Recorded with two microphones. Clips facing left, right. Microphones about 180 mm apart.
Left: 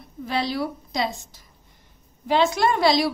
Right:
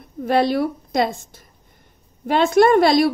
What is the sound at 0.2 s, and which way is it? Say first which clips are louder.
A woman's voice: right 8 dB; 55° right (ahead or behind).